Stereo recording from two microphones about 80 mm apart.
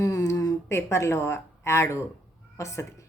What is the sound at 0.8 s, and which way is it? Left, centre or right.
Speech, left.